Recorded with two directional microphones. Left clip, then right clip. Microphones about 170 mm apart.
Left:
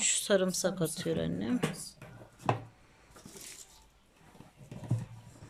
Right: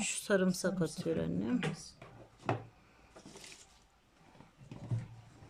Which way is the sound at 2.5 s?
15° left (ahead or behind).